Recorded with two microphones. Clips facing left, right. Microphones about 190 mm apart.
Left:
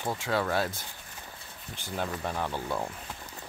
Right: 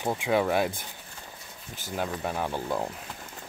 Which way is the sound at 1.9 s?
5° right (ahead or behind).